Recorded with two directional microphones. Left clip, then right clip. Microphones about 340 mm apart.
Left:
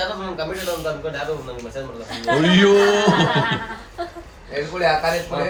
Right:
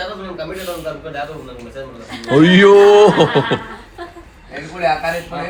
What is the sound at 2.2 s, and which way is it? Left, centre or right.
Speech, right.